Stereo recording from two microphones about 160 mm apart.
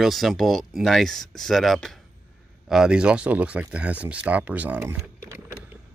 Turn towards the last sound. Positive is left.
turn(degrees=-15)  # may be behind; listen again after turning